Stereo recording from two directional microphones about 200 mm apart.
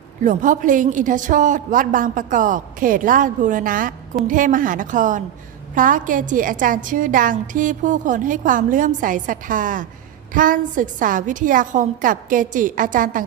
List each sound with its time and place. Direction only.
0.3 s a woman's voice: 40° right (ahead or behind)